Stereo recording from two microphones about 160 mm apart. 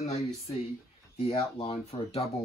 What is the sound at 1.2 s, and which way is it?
Speech, 35° left (ahead or behind).